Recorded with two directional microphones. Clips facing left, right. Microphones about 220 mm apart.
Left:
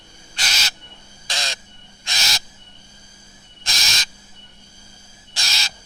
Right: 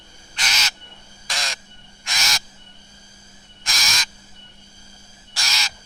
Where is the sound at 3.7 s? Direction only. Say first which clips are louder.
Right 1 dB; 25° left (ahead or behind).